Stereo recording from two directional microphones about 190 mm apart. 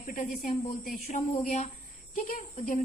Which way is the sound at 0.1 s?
45° left (ahead or behind).